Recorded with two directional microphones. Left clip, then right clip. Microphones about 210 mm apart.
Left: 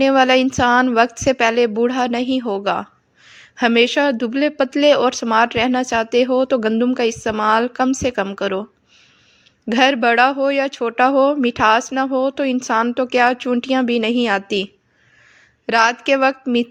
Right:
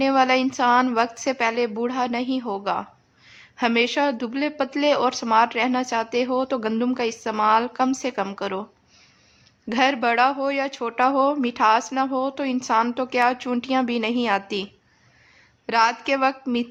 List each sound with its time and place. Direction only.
0.0 s a woman's voice: 25° left (ahead or behind)
9.6 s a woman's voice: 20° left (ahead or behind)